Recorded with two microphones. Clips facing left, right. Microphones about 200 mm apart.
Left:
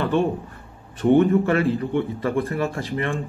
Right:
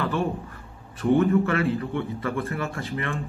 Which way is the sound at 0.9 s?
30° left (ahead or behind).